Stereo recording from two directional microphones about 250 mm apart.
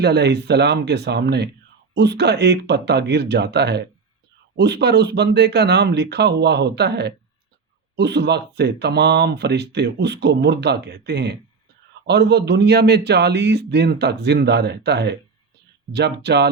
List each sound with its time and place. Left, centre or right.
0.0 s speech: right